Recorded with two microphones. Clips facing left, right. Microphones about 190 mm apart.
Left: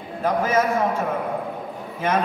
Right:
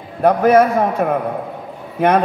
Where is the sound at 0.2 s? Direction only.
65° right (ahead or behind).